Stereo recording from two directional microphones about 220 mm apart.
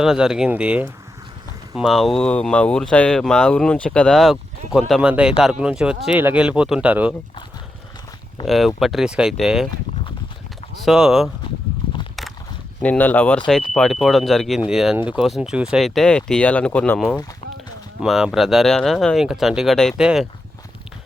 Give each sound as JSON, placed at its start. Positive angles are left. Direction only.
{"t": 0.0, "sound": "speech", "side_deg": 0}
{"t": 8.4, "sound": "speech", "side_deg": 0}
{"t": 10.8, "sound": "speech", "side_deg": 0}
{"t": 11.8, "sound": "a sound", "side_deg": 25}
{"t": 12.8, "sound": "speech", "side_deg": 5}